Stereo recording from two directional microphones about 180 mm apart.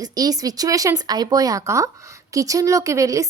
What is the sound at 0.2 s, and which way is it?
A woman's voice, 20° right (ahead or behind).